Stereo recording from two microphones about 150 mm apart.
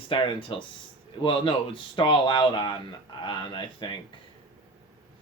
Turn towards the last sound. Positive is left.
turn(degrees=30)  # may be behind; listen again after turning